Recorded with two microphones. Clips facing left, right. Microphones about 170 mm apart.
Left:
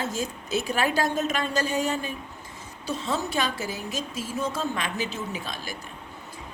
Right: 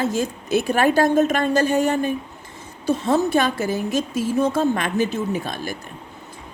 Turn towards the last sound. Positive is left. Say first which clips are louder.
# right 9 dB
turn(degrees=-50)  # may be behind; listen again after turning